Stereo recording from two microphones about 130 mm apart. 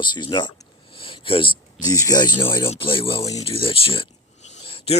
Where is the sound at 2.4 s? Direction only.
45° left (ahead or behind).